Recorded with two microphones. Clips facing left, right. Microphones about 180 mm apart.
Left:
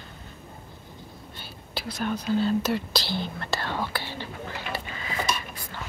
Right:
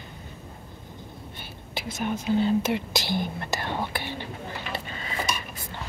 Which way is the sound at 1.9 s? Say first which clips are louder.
Right 1 dB; 20° right (ahead or behind).